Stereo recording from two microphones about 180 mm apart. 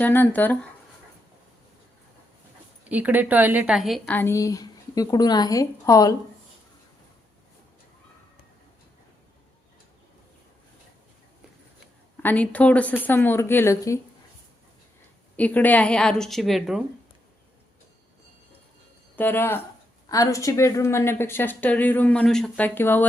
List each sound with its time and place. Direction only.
0.0 s a woman's voice: 10° left (ahead or behind)
2.9 s a woman's voice: 10° right (ahead or behind); by 6.1 s 20° left (ahead or behind)
12.2 s a woman's voice: 10° left (ahead or behind)
15.4 s a woman's voice: 10° left (ahead or behind)
19.1 s a woman's voice: 10° left (ahead or behind)